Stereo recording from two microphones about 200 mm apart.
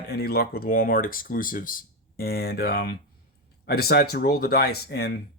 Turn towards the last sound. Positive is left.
turn(degrees=55)  # may be behind; listen again after turning